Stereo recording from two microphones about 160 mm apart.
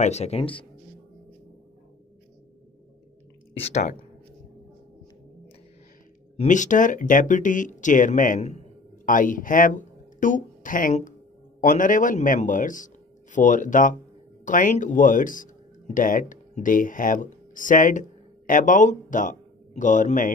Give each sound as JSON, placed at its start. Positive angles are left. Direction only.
{"t": 0.0, "sound": "speech", "side_deg": 45}
{"t": 3.5, "sound": "speech", "side_deg": 40}
{"t": 6.3, "sound": "speech", "side_deg": 50}